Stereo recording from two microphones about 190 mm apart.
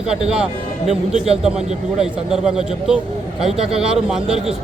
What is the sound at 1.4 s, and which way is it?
Speech, 5° right (ahead or behind).